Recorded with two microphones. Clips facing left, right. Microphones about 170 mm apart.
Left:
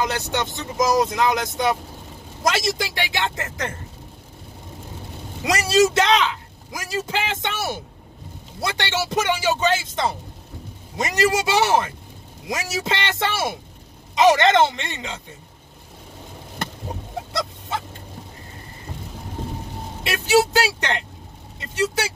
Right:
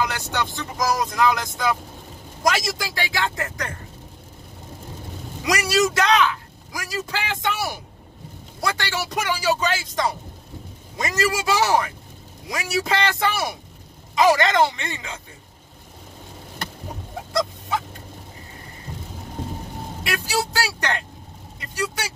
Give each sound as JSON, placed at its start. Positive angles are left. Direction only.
{"t": 0.0, "sound": "a man's voice", "side_deg": 20}
{"t": 5.5, "sound": "a man's voice", "side_deg": 25}
{"t": 20.0, "sound": "a man's voice", "side_deg": 20}